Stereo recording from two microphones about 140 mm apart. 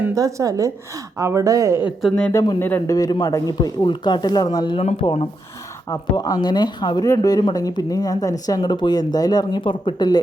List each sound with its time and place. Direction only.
0.0 s speech: 25° right (ahead or behind)
2.0 s speech: centre (ahead or behind)
2.3 s speech: 30° left (ahead or behind)
2.6 s a man's voice: 15° left (ahead or behind)
2.9 s speech: 25° left (ahead or behind)
4.8 s speech: 50° left (ahead or behind)
5.0 s speech: 40° left (ahead or behind)
5.9 s speech: 30° left (ahead or behind)